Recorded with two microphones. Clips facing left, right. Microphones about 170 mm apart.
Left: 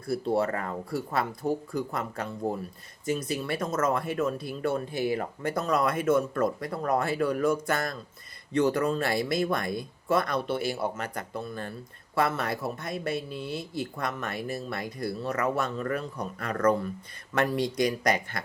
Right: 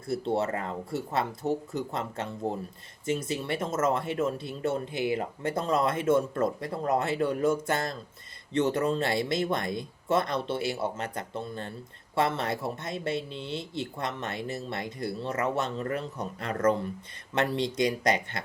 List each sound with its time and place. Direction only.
0.3 s speech: 25° right (ahead or behind)